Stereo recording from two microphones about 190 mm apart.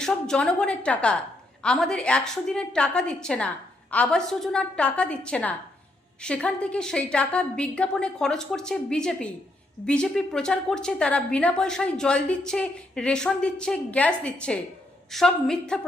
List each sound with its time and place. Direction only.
0.0 s a woman's voice: 5° left (ahead or behind)